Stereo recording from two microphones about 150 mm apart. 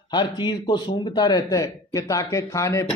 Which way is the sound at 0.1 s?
30° left (ahead or behind).